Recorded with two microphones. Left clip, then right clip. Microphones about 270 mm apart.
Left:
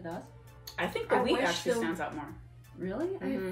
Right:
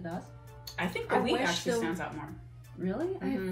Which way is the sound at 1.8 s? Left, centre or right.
Centre.